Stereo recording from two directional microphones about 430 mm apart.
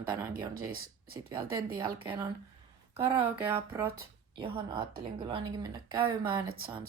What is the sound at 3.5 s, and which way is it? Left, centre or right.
Speech, centre.